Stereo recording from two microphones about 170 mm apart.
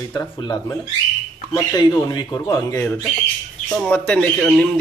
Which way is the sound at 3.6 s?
5° left (ahead or behind).